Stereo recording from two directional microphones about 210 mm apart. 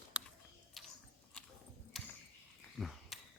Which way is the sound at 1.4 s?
Centre (ahead or behind).